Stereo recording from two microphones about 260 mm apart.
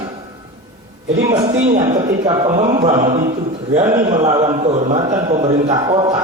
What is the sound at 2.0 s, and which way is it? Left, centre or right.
A man's voice, centre.